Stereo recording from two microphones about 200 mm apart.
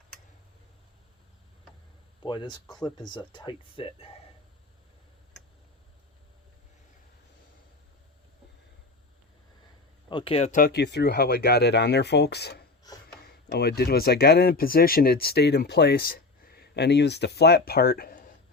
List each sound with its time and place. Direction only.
2.2 s speech: 20° left (ahead or behind)
10.1 s speech: 25° left (ahead or behind); by 18.3 s 45° left (ahead or behind)